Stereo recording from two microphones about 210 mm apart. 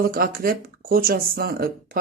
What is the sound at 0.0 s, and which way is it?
Speech, 45° right (ahead or behind).